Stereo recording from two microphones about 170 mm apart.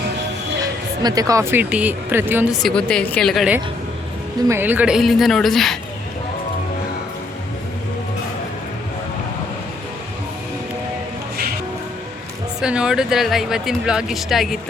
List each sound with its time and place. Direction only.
1.0 s speech: 20° right (ahead or behind)
2.6 s speech: 5° left (ahead or behind)
4.4 s speech: 10° right (ahead or behind)
12.5 s speech: 5° right (ahead or behind)